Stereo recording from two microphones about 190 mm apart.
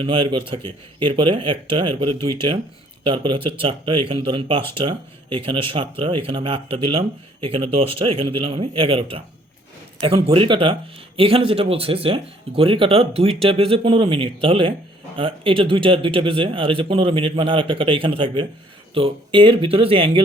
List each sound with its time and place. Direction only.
0.0 s speech: 25° right (ahead or behind)
10.2 s speech: 25° right (ahead or behind)